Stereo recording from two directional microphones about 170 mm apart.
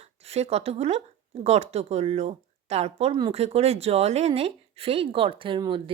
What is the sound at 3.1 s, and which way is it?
Speech, 25° right (ahead or behind).